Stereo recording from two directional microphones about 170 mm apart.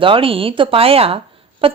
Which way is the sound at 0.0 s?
30° right (ahead or behind).